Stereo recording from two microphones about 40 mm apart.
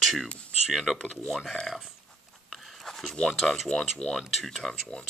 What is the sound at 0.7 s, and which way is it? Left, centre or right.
Speech, centre.